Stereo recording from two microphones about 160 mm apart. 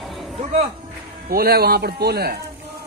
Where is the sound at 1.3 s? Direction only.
70° right (ahead or behind).